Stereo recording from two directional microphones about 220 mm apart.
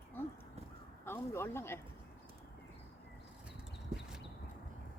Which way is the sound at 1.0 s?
10° left (ahead or behind).